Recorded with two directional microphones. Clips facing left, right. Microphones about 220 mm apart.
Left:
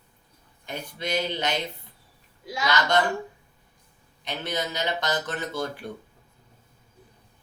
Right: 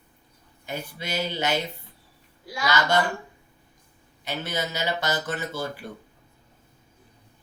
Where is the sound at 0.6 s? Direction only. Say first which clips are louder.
Left 1 dB; 5° right (ahead or behind).